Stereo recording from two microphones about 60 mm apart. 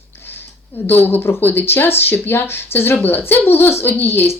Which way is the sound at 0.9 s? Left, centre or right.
Left.